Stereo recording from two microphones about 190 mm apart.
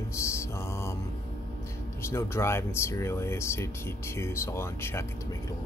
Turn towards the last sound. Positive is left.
turn(degrees=15)  # may be behind; listen again after turning